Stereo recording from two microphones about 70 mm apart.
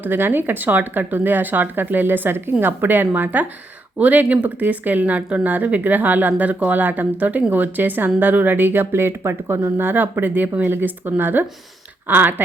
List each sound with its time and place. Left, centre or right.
0.0 s speech: right